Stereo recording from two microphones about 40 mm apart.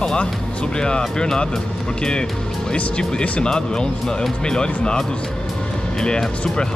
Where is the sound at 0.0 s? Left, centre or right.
Left.